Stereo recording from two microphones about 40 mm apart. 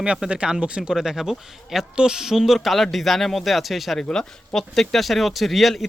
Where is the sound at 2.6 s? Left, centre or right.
Centre.